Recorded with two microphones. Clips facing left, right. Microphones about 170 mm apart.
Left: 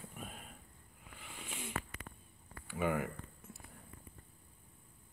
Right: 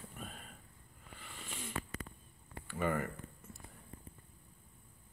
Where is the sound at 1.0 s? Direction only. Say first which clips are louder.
Even; 10° left (ahead or behind).